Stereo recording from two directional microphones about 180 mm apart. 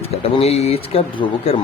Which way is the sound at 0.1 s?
35° left (ahead or behind).